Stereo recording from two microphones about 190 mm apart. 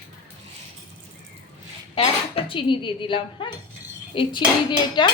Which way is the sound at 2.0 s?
30° left (ahead or behind).